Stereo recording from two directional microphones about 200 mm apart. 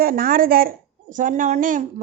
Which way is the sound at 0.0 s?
45° right (ahead or behind).